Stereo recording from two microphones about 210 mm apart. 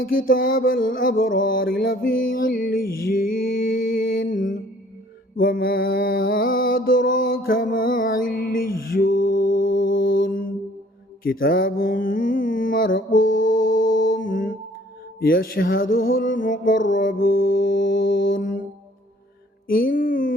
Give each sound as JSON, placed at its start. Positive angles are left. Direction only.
{"t": 0.0, "sound": "mantra", "side_deg": 40}
{"t": 13.5, "sound": "music", "side_deg": 40}
{"t": 16.1, "sound": "mantra", "side_deg": 40}
{"t": 17.0, "sound": "music", "side_deg": 40}
{"t": 19.6, "sound": "mantra", "side_deg": 45}